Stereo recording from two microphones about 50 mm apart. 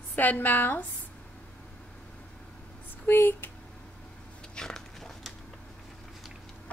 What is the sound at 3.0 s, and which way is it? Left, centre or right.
Speech, left.